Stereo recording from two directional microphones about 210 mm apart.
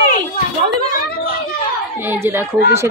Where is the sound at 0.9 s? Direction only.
40° left (ahead or behind).